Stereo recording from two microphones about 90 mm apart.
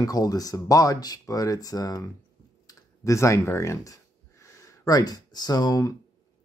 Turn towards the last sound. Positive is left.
turn(degrees=45)  # may be behind; listen again after turning